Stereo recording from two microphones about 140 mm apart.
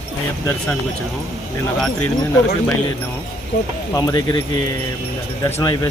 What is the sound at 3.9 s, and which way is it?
Speech, 25° left (ahead or behind).